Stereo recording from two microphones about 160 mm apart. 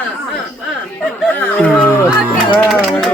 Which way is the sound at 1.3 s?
10° left (ahead or behind).